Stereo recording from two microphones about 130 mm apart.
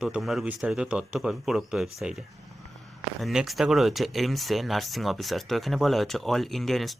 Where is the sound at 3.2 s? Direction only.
Centre (ahead or behind).